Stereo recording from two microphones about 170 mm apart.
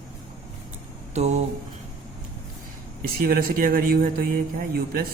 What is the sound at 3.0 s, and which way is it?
Speech, 60° right (ahead or behind).